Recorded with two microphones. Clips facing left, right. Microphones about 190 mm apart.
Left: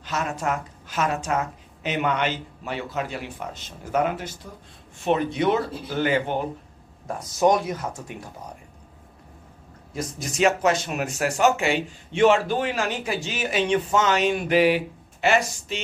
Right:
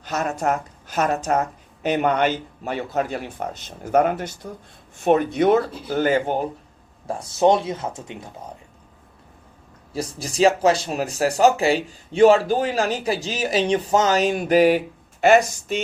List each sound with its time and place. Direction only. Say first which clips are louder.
0.0 s a woman's voice: right 4 dB; 40° right (ahead or behind)
7.1 s speech: right 3 dB; 30° right (ahead or behind)
9.9 s a woman's voice: right 2 dB; 35° right (ahead or behind)